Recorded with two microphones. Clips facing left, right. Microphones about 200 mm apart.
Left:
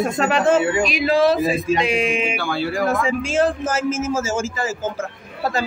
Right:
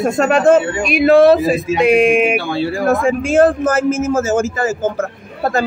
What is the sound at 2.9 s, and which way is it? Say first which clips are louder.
A man's voice: right 6 dB; 50° right (ahead or behind).